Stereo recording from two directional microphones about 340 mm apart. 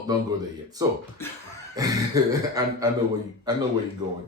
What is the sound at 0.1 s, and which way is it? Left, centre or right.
Speech, centre.